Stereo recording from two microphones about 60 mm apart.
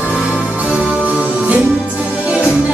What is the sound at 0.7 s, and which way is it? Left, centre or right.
Music, centre.